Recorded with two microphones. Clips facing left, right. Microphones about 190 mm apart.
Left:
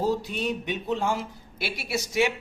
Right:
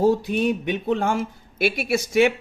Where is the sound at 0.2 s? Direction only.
55° right (ahead or behind).